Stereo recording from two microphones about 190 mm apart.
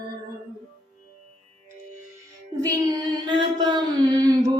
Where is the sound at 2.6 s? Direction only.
20° right (ahead or behind).